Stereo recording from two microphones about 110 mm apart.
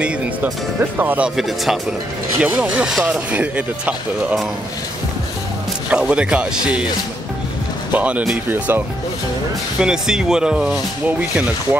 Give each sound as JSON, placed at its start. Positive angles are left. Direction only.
{"t": 0.0, "sound": "speech", "side_deg": -15}
{"t": 1.3, "sound": "speech", "side_deg": 0}
{"t": 2.4, "sound": "speech", "side_deg": -15}
{"t": 5.9, "sound": "speech", "side_deg": -10}
{"t": 7.9, "sound": "speech", "side_deg": -15}
{"t": 9.8, "sound": "speech", "side_deg": -5}